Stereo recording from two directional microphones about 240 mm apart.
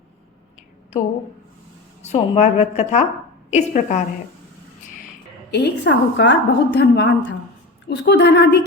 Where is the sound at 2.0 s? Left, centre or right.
Left.